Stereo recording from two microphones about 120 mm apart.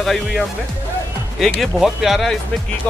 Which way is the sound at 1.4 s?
Centre (ahead or behind).